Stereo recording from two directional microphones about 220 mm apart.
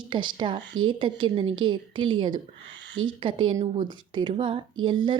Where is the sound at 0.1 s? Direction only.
20° right (ahead or behind).